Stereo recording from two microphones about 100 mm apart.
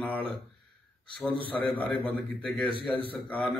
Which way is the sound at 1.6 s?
15° left (ahead or behind).